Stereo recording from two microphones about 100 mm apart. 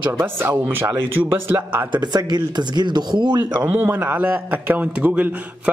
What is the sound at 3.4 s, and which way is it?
Speech, 15° right (ahead or behind).